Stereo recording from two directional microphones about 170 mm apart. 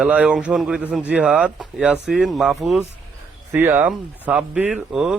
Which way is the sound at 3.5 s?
15° right (ahead or behind).